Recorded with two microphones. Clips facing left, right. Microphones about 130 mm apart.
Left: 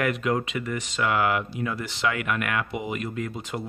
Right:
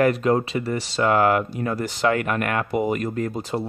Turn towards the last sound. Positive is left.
turn(degrees=-40)  # may be behind; listen again after turning